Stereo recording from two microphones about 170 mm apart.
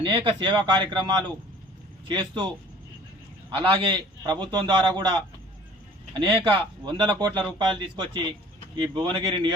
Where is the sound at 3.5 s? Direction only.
30° right (ahead or behind).